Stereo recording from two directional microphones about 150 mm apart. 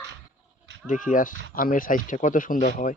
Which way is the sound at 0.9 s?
60° left (ahead or behind).